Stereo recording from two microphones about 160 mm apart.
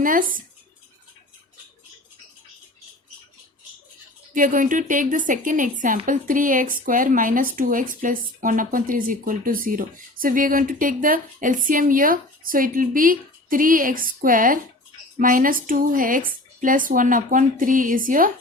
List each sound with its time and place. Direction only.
0.0 s speech: 60° right (ahead or behind)
4.4 s speech: 60° right (ahead or behind)